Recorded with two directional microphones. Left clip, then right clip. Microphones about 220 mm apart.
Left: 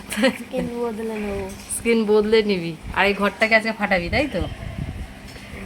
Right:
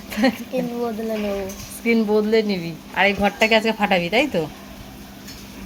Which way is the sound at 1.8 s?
30° left (ahead or behind).